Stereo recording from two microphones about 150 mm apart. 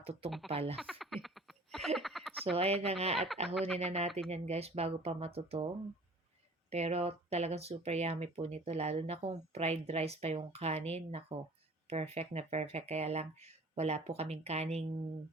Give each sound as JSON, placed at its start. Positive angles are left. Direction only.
{"t": 0.0, "sound": "speech", "side_deg": -40}
{"t": 0.8, "sound": "frog", "side_deg": 0}
{"t": 2.4, "sound": "speech", "side_deg": -40}
{"t": 6.7, "sound": "speech", "side_deg": -45}